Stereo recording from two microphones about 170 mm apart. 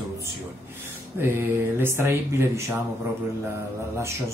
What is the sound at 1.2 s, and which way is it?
Mantra, 15° right (ahead or behind).